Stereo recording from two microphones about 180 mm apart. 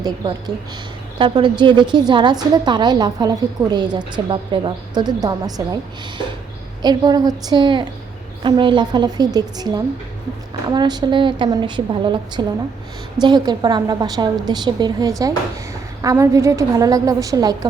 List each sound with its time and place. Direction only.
0.0 s a woman's voice: 20° right (ahead or behind)
6.8 s a woman's voice: 25° right (ahead or behind)